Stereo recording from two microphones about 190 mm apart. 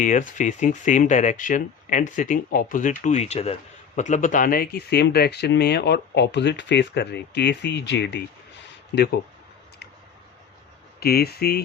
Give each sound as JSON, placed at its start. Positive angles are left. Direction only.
{"t": 0.0, "sound": "speech", "side_deg": 40}
{"t": 11.0, "sound": "speech", "side_deg": 55}